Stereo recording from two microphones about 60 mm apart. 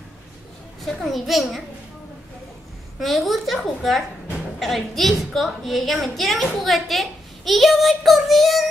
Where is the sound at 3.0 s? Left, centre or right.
Centre.